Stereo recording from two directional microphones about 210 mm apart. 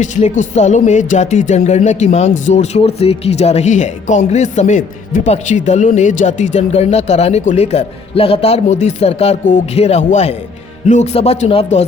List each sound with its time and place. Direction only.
0.0 s speech: 35° left (ahead or behind)